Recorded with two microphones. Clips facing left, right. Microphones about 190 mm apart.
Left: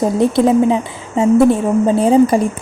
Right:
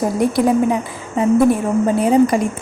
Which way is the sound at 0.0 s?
25° left (ahead or behind).